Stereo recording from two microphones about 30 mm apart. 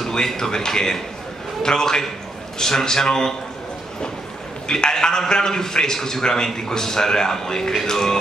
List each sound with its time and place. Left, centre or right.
0.4 s a man's voice: left
4.6 s a man's voice: left